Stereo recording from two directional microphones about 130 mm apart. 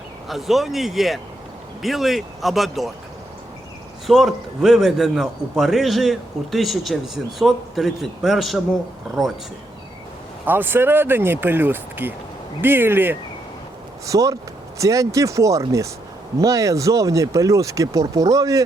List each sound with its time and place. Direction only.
0.3 s a man's voice: centre (ahead or behind)
4.0 s a man's voice: centre (ahead or behind)
10.4 s speech: 15° right (ahead or behind)